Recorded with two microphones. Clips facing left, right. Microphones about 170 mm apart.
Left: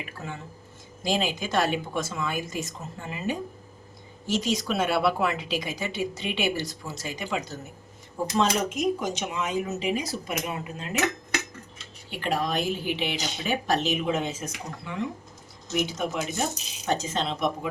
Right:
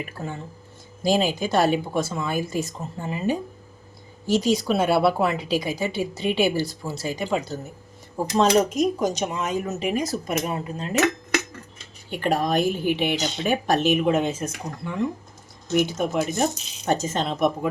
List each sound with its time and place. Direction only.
0.2 s a woman's voice: 35° right (ahead or behind)
12.2 s speech: 45° right (ahead or behind)